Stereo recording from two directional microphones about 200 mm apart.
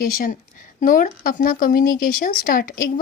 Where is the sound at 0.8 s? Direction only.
40° left (ahead or behind).